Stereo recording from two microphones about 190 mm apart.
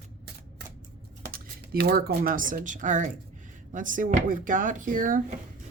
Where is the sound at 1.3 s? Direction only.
55° right (ahead or behind).